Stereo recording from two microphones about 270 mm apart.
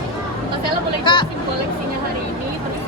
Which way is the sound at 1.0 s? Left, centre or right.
Centre.